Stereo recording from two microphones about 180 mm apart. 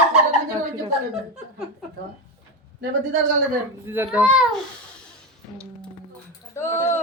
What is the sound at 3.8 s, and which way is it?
Speech, 10° right (ahead or behind).